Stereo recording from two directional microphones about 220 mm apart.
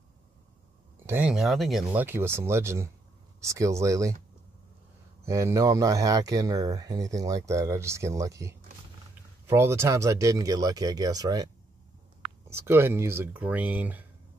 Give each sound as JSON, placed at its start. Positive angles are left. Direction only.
{"t": 1.0, "sound": "speech", "side_deg": -5}
{"t": 5.2, "sound": "speech", "side_deg": -15}